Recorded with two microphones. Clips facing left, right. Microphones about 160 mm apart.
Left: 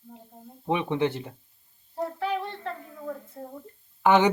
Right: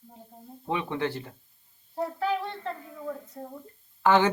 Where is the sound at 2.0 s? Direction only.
Centre (ahead or behind).